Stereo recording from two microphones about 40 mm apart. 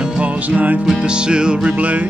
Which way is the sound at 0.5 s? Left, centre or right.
Right.